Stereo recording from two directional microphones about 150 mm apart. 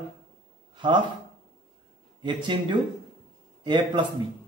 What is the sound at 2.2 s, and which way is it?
Speech, 30° right (ahead or behind).